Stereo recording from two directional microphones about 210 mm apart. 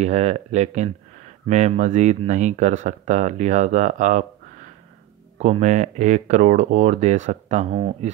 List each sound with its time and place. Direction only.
0.0 s speech: 30° right (ahead or behind)
5.4 s speech: 35° right (ahead or behind)